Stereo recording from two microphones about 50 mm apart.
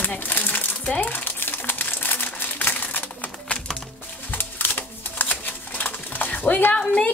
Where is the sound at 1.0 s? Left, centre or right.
Left.